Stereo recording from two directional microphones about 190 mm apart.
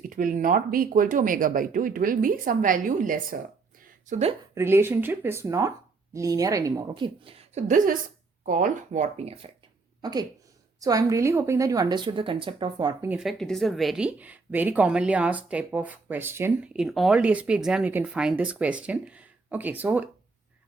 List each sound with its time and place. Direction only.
0.1 s speech: 45° right (ahead or behind)
4.1 s speech: 35° right (ahead or behind)
4.5 s a woman's voice: 10° right (ahead or behind); by 9.5 s 35° right (ahead or behind)
10.0 s a woman's voice: 20° right (ahead or behind)
13.1 s speech: centre (ahead or behind)